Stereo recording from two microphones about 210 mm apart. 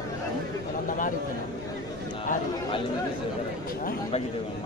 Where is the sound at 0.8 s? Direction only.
40° left (ahead or behind).